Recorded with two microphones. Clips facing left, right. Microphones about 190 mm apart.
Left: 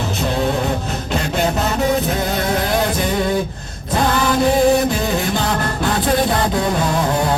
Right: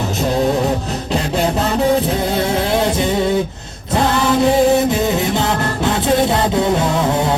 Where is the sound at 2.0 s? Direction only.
30° right (ahead or behind).